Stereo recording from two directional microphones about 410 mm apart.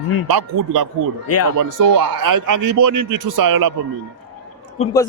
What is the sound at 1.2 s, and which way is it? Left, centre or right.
Speech, left.